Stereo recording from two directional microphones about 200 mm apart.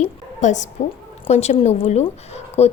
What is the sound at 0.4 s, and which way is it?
Speech, 35° left (ahead or behind).